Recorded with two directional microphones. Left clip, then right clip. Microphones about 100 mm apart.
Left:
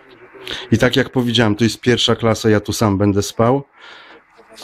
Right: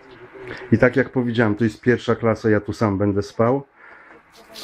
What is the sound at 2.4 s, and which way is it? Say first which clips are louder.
Speech: left 4 dB; 50° left (ahead or behind).